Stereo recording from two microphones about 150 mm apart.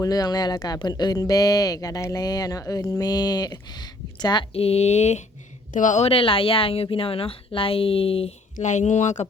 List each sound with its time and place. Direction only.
0.0 s speech: 25° left (ahead or behind); by 6.1 s 55° left (ahead or behind)
6.1 s a woman's voice: 35° left (ahead or behind)
8.5 s speech: 50° left (ahead or behind)